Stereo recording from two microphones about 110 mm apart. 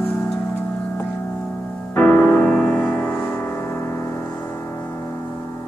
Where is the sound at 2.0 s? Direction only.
15° left (ahead or behind).